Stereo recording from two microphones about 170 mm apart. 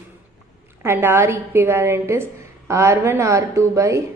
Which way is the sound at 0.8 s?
15° right (ahead or behind).